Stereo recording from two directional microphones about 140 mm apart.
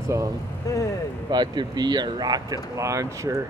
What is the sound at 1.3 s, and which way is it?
Speech, 30° right (ahead or behind).